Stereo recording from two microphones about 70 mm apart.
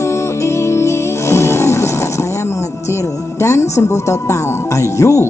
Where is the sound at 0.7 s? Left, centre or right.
Left.